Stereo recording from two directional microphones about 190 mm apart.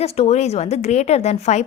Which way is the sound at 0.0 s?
35° left (ahead or behind).